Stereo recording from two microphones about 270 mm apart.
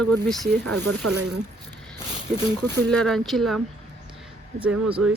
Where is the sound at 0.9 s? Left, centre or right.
Right.